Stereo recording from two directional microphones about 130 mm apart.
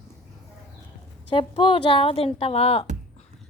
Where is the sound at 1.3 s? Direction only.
40° left (ahead or behind).